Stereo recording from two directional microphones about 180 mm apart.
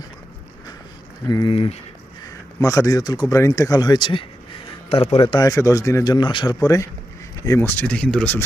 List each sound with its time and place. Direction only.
1.3 s speech: 25° left (ahead or behind)
2.2 s speech: 20° left (ahead or behind); by 5.4 s 35° left (ahead or behind)
5.4 s speech: 20° left (ahead or behind)